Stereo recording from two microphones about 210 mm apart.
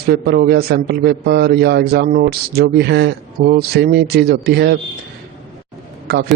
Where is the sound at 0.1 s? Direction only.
50° right (ahead or behind).